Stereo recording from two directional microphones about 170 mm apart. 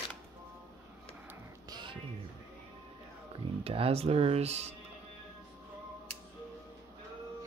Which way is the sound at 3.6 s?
35° right (ahead or behind).